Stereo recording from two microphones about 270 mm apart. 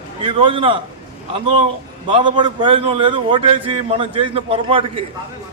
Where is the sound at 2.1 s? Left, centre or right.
Centre.